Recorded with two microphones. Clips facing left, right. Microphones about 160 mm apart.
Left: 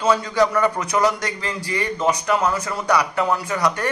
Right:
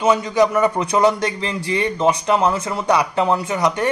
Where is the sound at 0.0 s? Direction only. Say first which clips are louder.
Right 2 dB; 20° right (ahead or behind).